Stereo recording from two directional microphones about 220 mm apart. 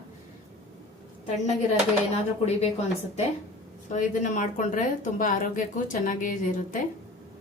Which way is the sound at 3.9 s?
35° left (ahead or behind).